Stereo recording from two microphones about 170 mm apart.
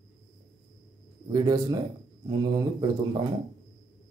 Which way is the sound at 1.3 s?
25° right (ahead or behind).